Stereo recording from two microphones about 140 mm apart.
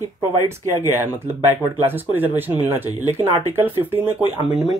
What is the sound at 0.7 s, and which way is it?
Speech, 15° right (ahead or behind).